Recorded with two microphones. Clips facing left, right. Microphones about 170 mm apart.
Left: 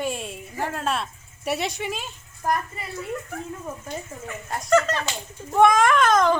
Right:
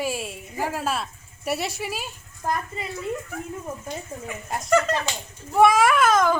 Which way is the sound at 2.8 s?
20° right (ahead or behind).